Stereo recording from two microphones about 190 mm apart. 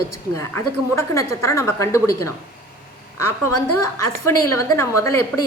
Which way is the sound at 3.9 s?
15° left (ahead or behind).